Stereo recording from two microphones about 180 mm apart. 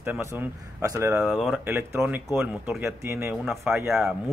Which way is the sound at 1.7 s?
15° right (ahead or behind).